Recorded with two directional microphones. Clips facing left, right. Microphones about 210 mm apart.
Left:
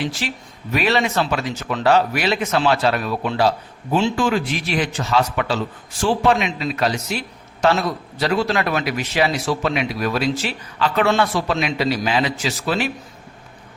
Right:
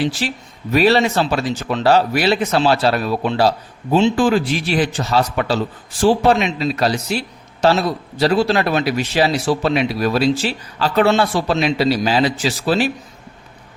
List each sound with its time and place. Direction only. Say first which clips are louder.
0.0 s a man's voice: right 5 dB; 30° right (ahead or behind)